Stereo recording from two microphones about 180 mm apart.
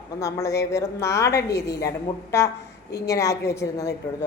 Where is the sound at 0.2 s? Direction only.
15° left (ahead or behind).